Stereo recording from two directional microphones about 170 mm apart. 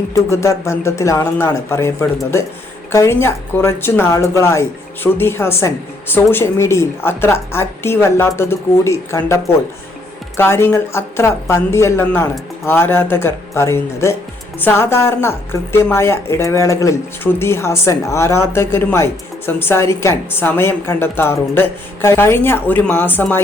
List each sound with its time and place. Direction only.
0.1 s speech: 15° left (ahead or behind)